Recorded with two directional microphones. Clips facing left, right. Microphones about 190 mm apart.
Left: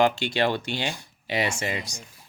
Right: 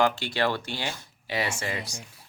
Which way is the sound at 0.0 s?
20° left (ahead or behind).